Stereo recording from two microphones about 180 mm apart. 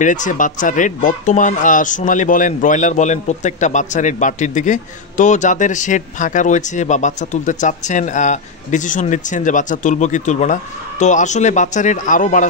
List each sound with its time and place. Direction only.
0.0 s speech: 45° left (ahead or behind)